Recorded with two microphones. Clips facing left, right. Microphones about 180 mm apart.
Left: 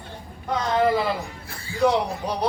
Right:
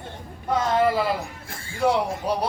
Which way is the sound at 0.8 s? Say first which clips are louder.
Left 2 dB; 5° right (ahead or behind).